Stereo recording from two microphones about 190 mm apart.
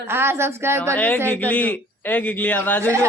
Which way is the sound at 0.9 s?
10° left (ahead or behind).